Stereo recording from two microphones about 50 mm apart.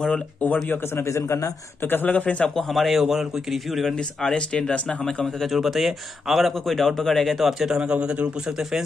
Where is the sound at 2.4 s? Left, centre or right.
Centre.